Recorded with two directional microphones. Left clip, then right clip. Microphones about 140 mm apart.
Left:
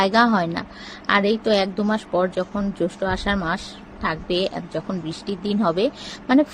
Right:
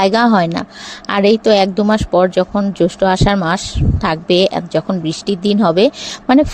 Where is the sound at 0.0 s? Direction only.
50° right (ahead or behind).